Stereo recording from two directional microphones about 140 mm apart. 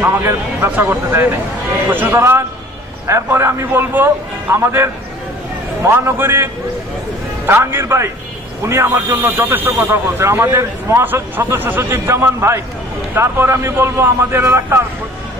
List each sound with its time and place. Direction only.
0.0 s speech: 15° right (ahead or behind)